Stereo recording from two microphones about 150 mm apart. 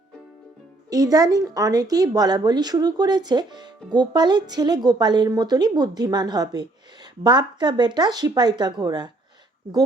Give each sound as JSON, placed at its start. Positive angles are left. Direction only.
{"t": 0.9, "sound": "speech", "side_deg": -25}